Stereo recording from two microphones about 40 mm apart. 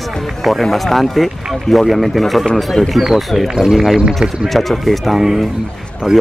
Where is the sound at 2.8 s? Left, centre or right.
Centre.